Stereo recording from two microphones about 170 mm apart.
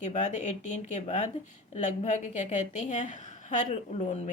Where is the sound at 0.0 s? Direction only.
45° left (ahead or behind).